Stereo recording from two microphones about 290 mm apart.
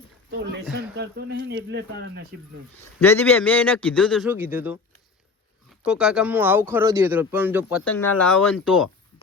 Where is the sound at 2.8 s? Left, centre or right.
Centre.